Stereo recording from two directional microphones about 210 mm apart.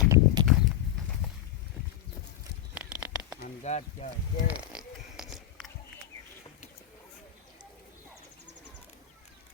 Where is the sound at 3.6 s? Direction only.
35° left (ahead or behind).